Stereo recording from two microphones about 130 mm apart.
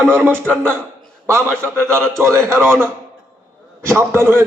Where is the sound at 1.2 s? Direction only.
20° right (ahead or behind).